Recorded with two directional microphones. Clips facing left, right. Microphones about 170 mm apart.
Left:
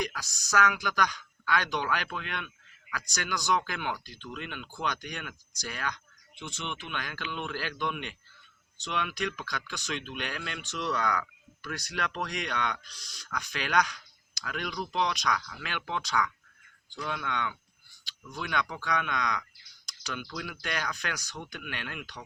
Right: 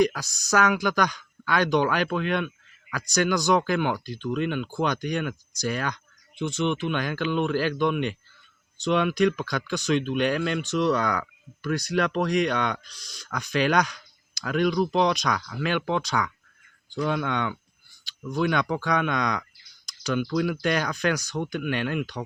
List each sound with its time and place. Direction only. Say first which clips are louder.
0.0 s speech: right 12 dB; 40° right (ahead or behind)
7.3 s speech: right 13 dB; 50° right (ahead or behind)
7.5 s speech: right 11 dB; 35° right (ahead or behind)
8.9 s speech: right 12 dB; 35° right (ahead or behind)